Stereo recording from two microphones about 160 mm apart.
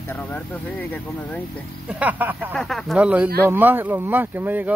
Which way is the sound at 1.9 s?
10° right (ahead or behind).